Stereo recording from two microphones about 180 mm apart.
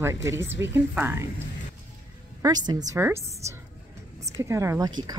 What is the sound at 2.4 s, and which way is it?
A woman's voice, 20° right (ahead or behind).